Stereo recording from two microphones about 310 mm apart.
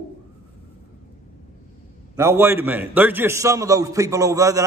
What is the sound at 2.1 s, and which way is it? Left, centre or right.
A man's voice, centre.